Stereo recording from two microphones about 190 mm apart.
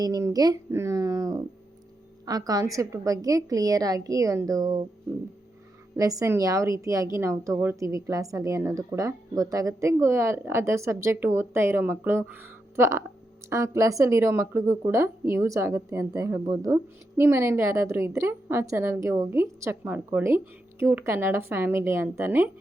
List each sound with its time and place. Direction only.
0.0 s a woman's voice: 15° right (ahead or behind)
6.0 s speech: 20° right (ahead or behind)